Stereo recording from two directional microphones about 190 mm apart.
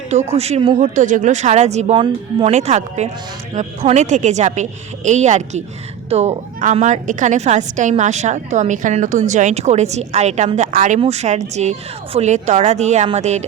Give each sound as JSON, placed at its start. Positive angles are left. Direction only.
{"t": 0.3, "sound": "a woman's voice", "side_deg": -35}